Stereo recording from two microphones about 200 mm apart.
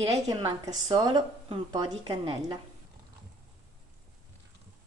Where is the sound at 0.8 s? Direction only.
20° right (ahead or behind).